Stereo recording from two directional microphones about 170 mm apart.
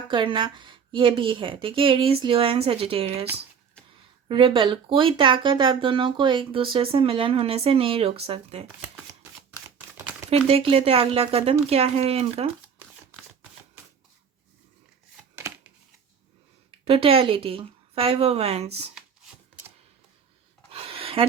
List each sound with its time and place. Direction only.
0.1 s speech: 30° right (ahead or behind)
4.3 s speech: 30° right (ahead or behind)
10.2 s speech: 35° right (ahead or behind)
16.8 s speech: 35° right (ahead or behind)
20.7 s a sound: 35° right (ahead or behind)